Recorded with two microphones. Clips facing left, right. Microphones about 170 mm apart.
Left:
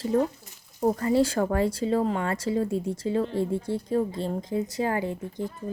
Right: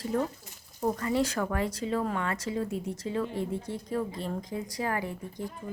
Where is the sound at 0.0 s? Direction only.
30° left (ahead or behind).